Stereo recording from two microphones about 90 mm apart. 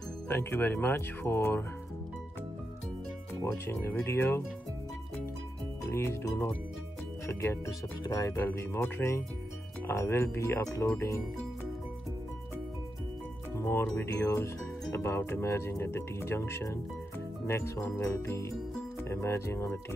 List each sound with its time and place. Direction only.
0.3 s speech: 25° left (ahead or behind)
3.9 s speech: 25° left (ahead or behind)
5.9 s speech: 25° left (ahead or behind)
8.0 s music: 35° left (ahead or behind)
8.5 s speech: 25° left (ahead or behind)
10.6 s music: 35° left (ahead or behind)
13.6 s music: 25° left (ahead or behind)
13.9 s speech: 30° left (ahead or behind)
18.0 s music: 30° left (ahead or behind)
19.0 s speech: 30° left (ahead or behind)